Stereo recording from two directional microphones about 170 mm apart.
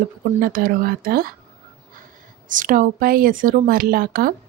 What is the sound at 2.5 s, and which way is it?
Speech, 50° right (ahead or behind).